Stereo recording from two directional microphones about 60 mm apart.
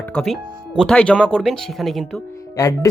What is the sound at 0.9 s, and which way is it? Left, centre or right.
Speech, centre.